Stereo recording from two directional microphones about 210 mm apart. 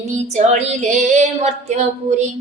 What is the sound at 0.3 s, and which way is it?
Female singing, 35° right (ahead or behind).